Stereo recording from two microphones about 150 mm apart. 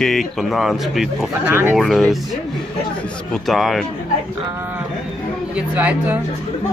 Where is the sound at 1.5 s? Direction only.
15° right (ahead or behind).